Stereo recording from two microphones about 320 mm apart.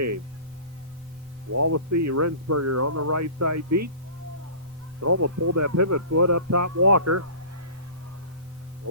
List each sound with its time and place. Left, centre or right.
1.5 s speech: right
4.9 s speech: right